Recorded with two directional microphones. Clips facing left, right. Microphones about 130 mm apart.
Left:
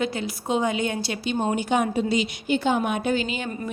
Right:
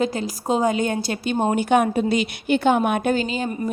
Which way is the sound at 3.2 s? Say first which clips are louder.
Right 4 dB; 35° right (ahead or behind).